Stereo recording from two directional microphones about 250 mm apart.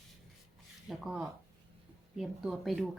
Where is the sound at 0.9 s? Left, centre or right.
Centre.